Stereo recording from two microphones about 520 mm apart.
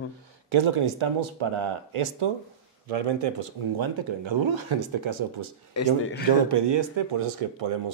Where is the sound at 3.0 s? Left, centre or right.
Right.